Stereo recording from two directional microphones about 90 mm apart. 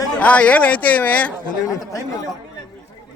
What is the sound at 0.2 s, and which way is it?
Speech, 15° left (ahead or behind).